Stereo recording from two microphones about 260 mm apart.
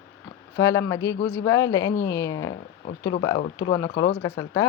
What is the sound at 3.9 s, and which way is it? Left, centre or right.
Speech, left.